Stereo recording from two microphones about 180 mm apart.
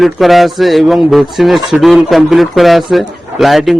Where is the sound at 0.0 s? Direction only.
Centre (ahead or behind).